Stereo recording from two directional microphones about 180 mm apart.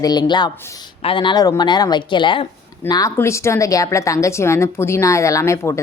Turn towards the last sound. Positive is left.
turn(degrees=15)  # may be behind; listen again after turning